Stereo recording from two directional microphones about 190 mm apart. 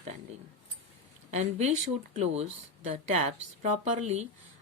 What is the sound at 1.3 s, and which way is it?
A woman's voice, 35° right (ahead or behind).